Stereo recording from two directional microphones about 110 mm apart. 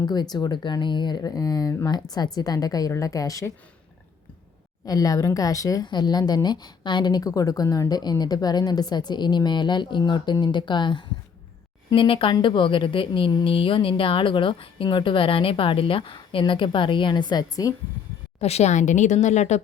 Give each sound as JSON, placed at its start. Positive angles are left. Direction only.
{"t": 0.0, "sound": "a woman's voice", "side_deg": 40}
{"t": 4.9, "sound": "a woman's voice", "side_deg": 35}
{"t": 18.3, "sound": "speech", "side_deg": 75}